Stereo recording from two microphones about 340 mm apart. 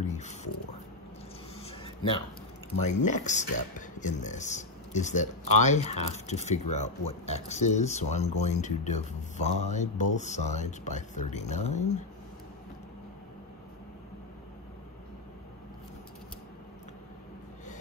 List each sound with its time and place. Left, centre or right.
0.0 s music: centre
1.6 s a sound: centre
2.8 s speech: left